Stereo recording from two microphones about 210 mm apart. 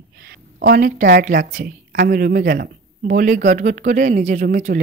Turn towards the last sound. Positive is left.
turn(degrees=-40)  # may be behind; listen again after turning